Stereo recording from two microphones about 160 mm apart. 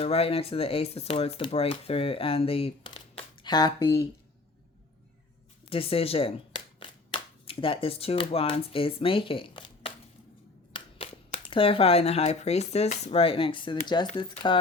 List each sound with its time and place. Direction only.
0.0 s speech: 35° left (ahead or behind)
5.6 s speech: 35° left (ahead or behind)